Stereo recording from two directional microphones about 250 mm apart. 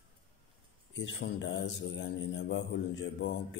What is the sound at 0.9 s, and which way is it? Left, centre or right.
A man's voice, left.